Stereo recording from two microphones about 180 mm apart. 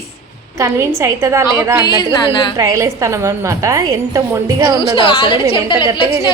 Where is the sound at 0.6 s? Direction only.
15° right (ahead or behind).